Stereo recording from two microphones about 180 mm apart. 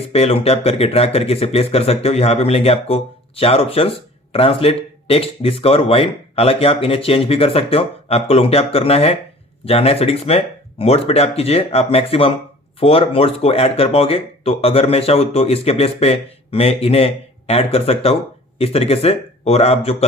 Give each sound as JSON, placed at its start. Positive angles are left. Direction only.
{"t": 0.1, "sound": "speech", "side_deg": 35}